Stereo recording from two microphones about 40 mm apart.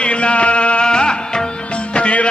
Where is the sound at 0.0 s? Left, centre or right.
Left.